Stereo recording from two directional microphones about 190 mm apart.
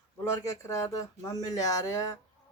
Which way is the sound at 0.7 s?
15° left (ahead or behind).